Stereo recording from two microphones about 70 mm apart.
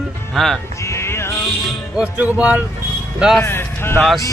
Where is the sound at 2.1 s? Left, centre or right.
Right.